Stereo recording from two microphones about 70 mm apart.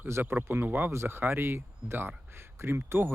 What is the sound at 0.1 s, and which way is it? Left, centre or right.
Speech, right.